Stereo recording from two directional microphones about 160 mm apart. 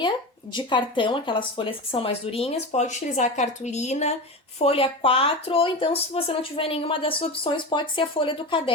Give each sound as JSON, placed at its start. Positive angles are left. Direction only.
{"t": 0.5, "sound": "speech", "side_deg": 30}